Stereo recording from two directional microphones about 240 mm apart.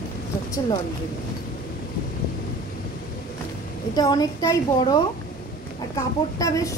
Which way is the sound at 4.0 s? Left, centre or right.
Centre.